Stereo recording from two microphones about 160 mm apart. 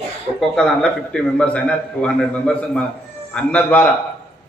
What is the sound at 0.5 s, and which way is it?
A man's voice, 5° left (ahead or behind).